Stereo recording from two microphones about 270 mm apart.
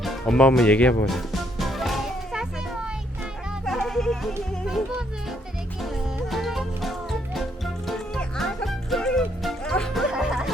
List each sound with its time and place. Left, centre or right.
0.0 s speech: centre
1.0 s music: centre
3.7 s speech: centre
6.3 s music: centre